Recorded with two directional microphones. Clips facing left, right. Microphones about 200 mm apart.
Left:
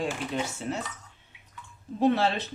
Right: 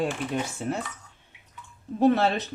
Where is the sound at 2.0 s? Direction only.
50° right (ahead or behind).